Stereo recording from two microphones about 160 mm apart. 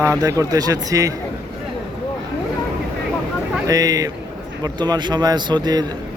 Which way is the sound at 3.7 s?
25° right (ahead or behind).